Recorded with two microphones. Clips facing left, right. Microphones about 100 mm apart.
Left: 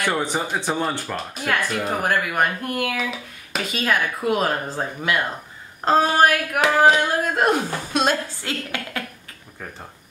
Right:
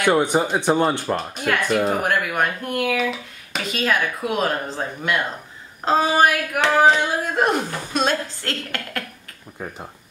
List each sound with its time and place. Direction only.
0.0 s speech: 20° right (ahead or behind)
1.1 s speech: centre (ahead or behind)